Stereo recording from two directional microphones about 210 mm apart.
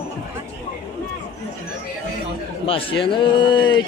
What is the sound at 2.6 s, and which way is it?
A man's voice, 25° left (ahead or behind).